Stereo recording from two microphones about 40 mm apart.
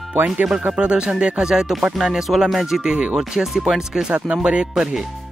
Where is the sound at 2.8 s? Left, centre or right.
Right.